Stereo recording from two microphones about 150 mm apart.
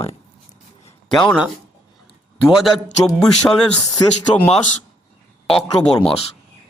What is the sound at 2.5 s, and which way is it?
Speech, centre (ahead or behind).